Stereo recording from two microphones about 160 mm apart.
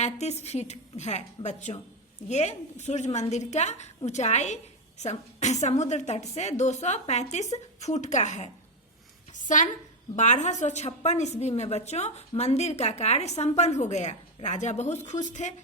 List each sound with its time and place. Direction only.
0.0 s a woman's voice: 45° left (ahead or behind)